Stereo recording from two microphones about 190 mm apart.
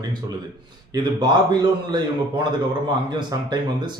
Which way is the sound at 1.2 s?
20° right (ahead or behind).